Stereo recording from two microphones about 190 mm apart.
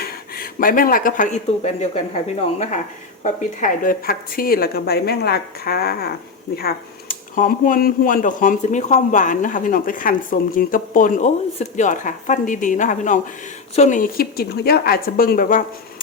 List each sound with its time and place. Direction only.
0.3 s speech: 50° left (ahead or behind)